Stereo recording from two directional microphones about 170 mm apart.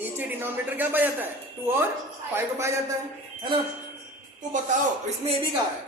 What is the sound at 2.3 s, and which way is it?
Speech, 15° right (ahead or behind).